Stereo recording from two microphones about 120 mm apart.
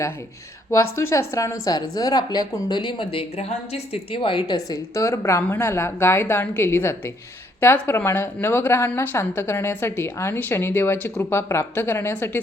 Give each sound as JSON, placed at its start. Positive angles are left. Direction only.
{"t": 0.8, "sound": "a woman's voice", "side_deg": 25}